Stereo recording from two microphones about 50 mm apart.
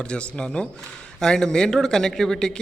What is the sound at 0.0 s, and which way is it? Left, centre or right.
A man's voice, centre.